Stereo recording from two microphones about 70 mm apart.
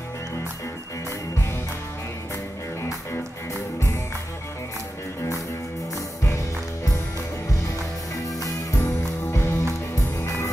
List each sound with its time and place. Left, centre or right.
1.3 s music: left
2.8 s music: left
8.5 s music: left